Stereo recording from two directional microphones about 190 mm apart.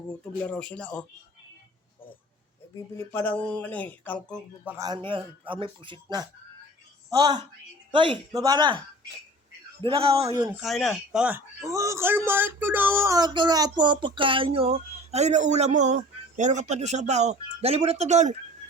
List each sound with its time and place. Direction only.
0.4 s speech: 5° left (ahead or behind)
2.7 s speech: 15° left (ahead or behind)
4.8 s a man's voice: 25° right (ahead or behind)
9.8 s a man's voice: 30° right (ahead or behind)
10.3 s speech: 10° right (ahead or behind)
10.6 s a man's voice: centre (ahead or behind); by 18.3 s 35° right (ahead or behind)